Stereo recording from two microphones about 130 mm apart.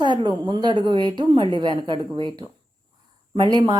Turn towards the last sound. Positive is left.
turn(degrees=-35)  # may be behind; listen again after turning